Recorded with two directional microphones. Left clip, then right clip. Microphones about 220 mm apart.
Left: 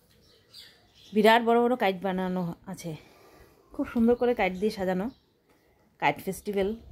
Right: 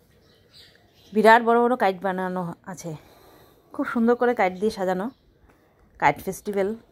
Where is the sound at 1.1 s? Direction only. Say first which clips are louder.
Right 5 dB; 5° right (ahead or behind).